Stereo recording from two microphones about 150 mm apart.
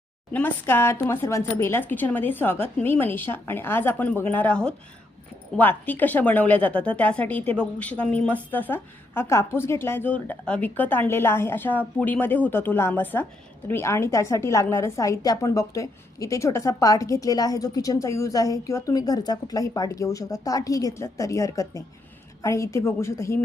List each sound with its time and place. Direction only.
0.3 s a woman's voice: 10° left (ahead or behind)